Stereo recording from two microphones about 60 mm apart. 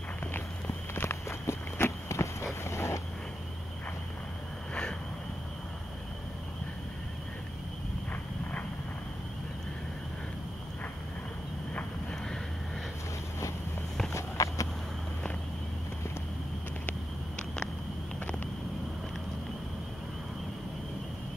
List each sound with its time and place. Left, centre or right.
0.3 s walk: left
8.1 s a sound: left
14.1 s clip-clop: left